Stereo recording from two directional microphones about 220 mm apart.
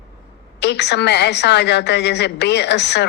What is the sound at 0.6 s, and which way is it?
A woman's voice, 50° left (ahead or behind).